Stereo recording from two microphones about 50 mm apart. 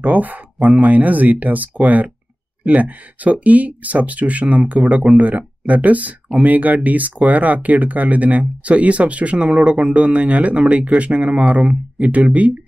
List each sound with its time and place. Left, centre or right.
0.0 s speech: right